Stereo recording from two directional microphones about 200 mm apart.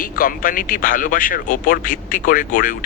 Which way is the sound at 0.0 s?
45° left (ahead or behind).